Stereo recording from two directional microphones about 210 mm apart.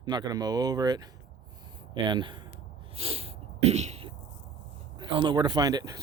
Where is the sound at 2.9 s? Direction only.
25° right (ahead or behind).